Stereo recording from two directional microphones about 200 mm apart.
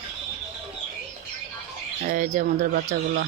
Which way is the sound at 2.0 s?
40° right (ahead or behind).